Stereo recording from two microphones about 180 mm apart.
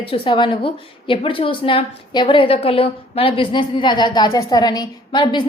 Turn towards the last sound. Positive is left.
turn(degrees=25)  # may be behind; listen again after turning